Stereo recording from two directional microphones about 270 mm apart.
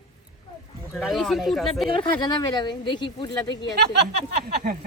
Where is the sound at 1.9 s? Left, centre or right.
Centre.